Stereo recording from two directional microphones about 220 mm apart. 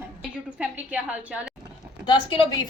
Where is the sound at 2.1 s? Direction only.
20° left (ahead or behind).